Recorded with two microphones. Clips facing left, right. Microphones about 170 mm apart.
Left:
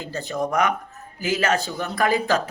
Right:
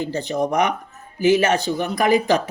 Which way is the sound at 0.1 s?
20° right (ahead or behind).